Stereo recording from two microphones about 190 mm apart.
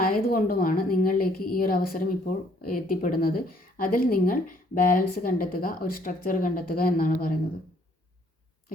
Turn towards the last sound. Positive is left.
turn(degrees=45)  # may be behind; listen again after turning